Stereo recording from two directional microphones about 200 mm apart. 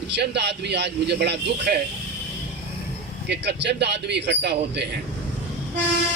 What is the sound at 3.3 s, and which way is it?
A man's voice, 60° right (ahead or behind).